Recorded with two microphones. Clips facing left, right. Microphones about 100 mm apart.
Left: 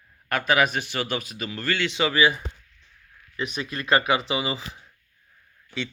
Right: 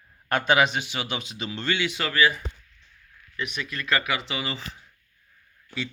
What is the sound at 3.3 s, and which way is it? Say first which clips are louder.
Speech: left 2 dB; 30° left (ahead or behind).